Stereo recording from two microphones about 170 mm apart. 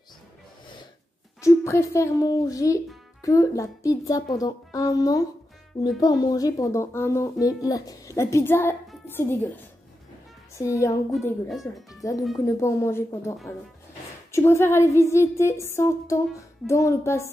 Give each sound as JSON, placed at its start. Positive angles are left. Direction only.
{"t": 1.4, "sound": "a child's voice", "side_deg": 15}
{"t": 10.5, "sound": "a child's voice", "side_deg": 20}
{"t": 11.4, "sound": "speech", "side_deg": 0}
{"t": 12.0, "sound": "a child's voice", "side_deg": 20}